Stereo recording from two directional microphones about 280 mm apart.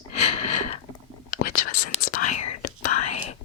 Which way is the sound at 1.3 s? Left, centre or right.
Left.